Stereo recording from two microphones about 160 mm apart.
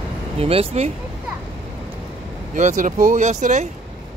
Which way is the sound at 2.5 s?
50° right (ahead or behind).